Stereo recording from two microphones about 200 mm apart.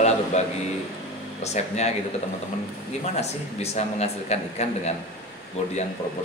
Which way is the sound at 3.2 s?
35° left (ahead or behind).